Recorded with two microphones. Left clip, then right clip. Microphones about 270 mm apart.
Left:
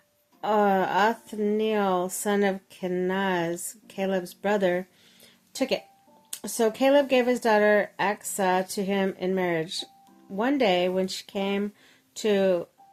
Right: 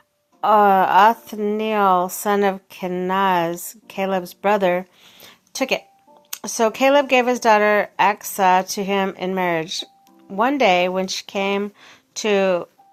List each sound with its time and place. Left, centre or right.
0.4 s speech: centre